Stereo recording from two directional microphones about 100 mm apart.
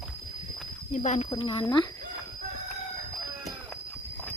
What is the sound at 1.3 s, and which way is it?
Speech, 65° left (ahead or behind).